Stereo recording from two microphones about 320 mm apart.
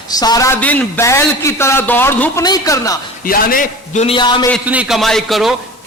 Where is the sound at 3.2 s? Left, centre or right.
Left.